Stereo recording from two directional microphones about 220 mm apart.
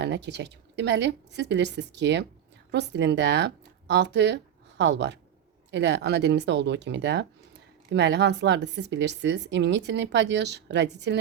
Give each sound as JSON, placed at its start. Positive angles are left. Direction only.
{"t": 0.0, "sound": "speech", "side_deg": -50}